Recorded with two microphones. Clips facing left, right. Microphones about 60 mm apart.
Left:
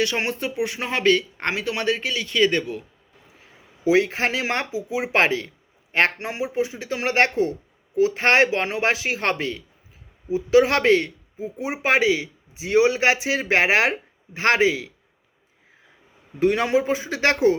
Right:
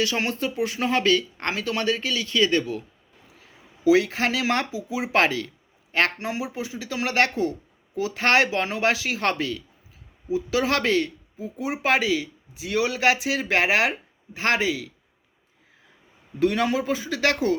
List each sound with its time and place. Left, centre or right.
0.0 s speech: left
3.8 s a man's voice: left
16.4 s a man's voice: left